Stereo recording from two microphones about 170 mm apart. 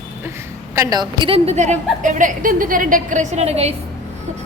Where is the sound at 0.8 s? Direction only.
25° right (ahead or behind).